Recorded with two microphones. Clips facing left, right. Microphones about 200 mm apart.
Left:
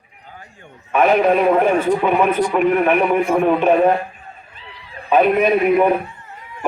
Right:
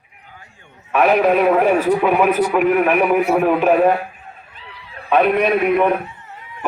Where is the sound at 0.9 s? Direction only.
Centre (ahead or behind).